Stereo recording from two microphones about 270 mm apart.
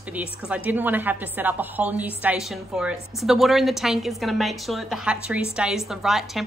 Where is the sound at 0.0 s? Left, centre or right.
Centre.